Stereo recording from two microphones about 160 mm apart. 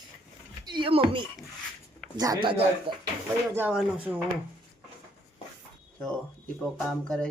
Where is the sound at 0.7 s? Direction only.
30° right (ahead or behind).